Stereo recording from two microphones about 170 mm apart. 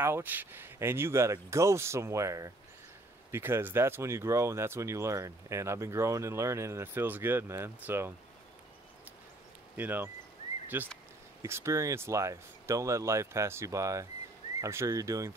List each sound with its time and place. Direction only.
0.0 s speech: 10° right (ahead or behind)
9.8 s speech: 10° right (ahead or behind)